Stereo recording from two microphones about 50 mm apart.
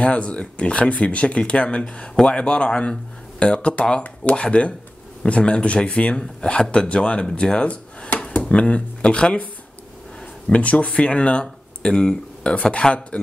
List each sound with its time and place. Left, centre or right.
0.0 s speech: left
10.5 s speech: left